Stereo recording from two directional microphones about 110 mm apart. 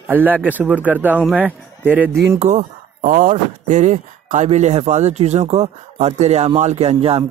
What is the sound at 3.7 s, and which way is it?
Speech, 90° right.